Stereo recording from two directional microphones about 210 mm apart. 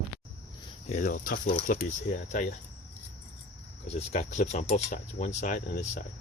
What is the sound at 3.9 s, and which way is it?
Speech, 30° left (ahead or behind).